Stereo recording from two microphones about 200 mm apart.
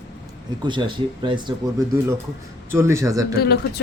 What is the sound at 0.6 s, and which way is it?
Speech, 25° right (ahead or behind).